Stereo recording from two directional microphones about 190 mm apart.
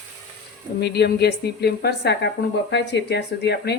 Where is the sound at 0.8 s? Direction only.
60° left (ahead or behind).